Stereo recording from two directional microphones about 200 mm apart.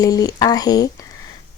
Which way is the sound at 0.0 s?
20° left (ahead or behind).